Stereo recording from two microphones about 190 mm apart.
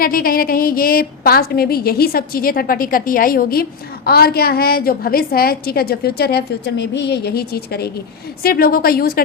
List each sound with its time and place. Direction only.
0.0 s a woman's voice: 50° left (ahead or behind)